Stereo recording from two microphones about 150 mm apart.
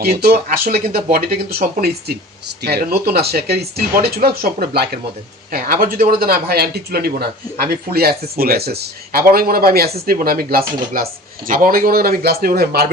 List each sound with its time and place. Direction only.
0.0 s speech: 90° right
5.5 s speech: 75° right (ahead or behind)